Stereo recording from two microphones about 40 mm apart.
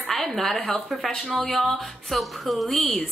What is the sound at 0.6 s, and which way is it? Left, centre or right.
Speech, left.